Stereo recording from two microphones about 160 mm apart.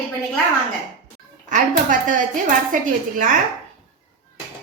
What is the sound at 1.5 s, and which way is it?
Speech, 55° right (ahead or behind).